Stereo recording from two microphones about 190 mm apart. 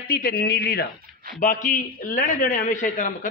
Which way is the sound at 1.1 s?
5° right (ahead or behind).